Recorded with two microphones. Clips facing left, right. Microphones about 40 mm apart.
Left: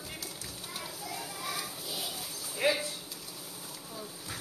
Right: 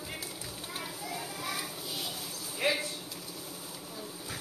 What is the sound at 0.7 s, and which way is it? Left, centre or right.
Children playing, centre.